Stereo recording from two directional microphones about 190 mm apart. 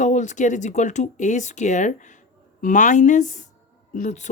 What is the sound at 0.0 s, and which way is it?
Speech, 40° left (ahead or behind).